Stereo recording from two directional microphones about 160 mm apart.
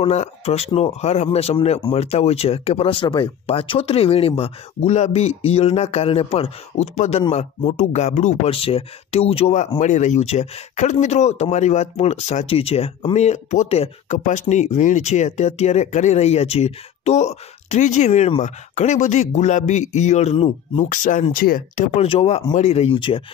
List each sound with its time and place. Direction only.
0.0 s speech: 40° left (ahead or behind)
20.9 s speech: 55° left (ahead or behind)
21.9 s speech: 35° left (ahead or behind)